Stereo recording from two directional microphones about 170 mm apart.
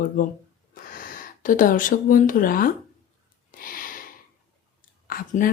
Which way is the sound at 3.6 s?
55° left (ahead or behind).